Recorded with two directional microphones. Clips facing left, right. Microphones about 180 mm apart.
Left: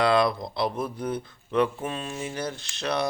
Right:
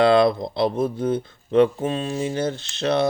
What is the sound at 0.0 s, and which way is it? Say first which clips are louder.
Speech: right 6 dB; 25° right (ahead or behind).